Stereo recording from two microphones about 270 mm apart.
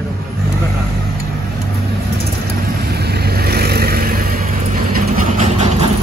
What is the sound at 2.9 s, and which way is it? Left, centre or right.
Vehicle, right.